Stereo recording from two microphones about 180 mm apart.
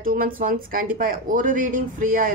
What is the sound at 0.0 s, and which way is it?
A woman's voice, 50° right (ahead or behind).